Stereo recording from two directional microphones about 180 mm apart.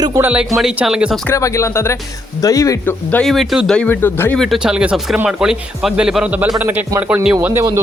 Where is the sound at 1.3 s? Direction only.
15° left (ahead or behind).